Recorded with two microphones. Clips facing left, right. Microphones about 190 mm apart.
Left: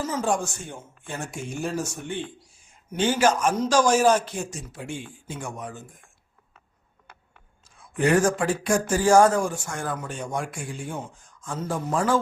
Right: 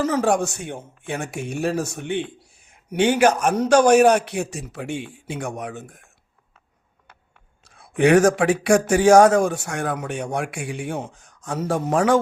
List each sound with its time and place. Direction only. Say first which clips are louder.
0.0 s speech: right 6 dB; 65° right (ahead or behind)
7.6 s speech: right 6 dB; 70° right (ahead or behind)